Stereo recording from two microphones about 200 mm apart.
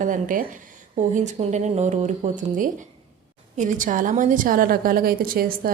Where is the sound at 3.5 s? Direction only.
40° right (ahead or behind).